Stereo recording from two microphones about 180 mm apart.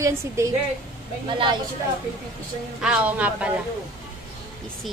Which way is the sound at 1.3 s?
25° right (ahead or behind).